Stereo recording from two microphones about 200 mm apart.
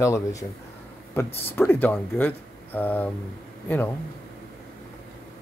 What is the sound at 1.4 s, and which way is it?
Speech, 10° left (ahead or behind).